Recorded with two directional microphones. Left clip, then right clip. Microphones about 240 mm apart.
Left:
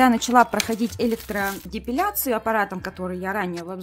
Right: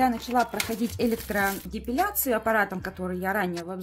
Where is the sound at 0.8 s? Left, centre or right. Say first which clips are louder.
Left 3 dB; centre.